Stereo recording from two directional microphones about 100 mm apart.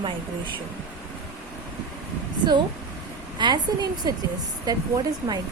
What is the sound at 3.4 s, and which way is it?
Speech, 45° right (ahead or behind).